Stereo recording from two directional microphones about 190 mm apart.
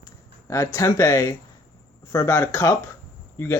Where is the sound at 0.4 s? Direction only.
15° left (ahead or behind).